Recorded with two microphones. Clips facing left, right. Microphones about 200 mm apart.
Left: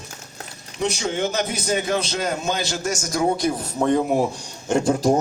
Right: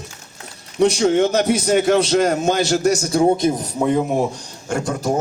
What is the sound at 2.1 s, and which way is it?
A man's voice, 45° right (ahead or behind).